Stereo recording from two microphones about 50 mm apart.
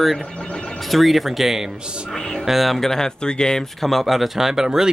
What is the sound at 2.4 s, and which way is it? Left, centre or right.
Speech, centre.